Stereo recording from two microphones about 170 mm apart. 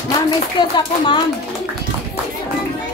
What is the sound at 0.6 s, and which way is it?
Speech, 25° left (ahead or behind).